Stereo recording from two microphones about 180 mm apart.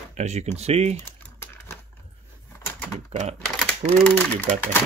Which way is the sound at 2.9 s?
40° right (ahead or behind).